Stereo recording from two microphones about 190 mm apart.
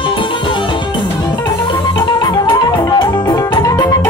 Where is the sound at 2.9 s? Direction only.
20° left (ahead or behind).